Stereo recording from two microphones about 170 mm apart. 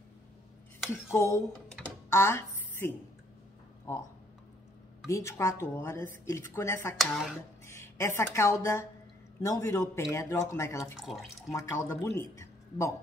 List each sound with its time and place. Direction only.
1.1 s a woman's voice: 15° left (ahead or behind)
2.0 s a sound: 15° left (ahead or behind)
5.0 s a woman's voice: 15° left (ahead or behind)
7.0 s speech: centre (ahead or behind)
7.6 s a woman's voice: 15° left (ahead or behind)
11.0 s speech: centre (ahead or behind)
11.5 s speech: 15° left (ahead or behind)